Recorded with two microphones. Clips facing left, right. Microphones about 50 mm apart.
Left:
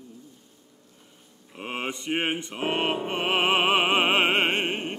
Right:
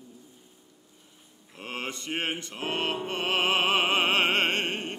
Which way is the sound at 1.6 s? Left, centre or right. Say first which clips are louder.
Left 4 dB; centre.